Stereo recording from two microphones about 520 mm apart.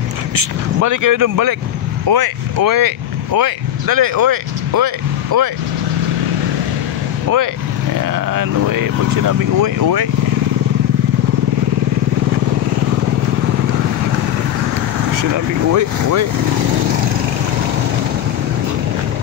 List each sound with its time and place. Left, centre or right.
0.4 s speech: right
8.1 s speech: right
15.3 s speech: right